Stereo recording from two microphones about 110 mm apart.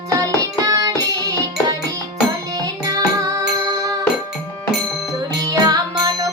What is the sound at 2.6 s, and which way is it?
Music, 30° right (ahead or behind).